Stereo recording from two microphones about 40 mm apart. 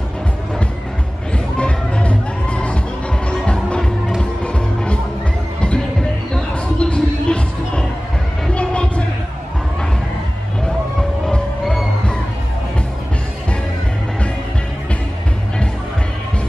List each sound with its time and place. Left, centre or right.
1.6 s music: left
6.3 s music: left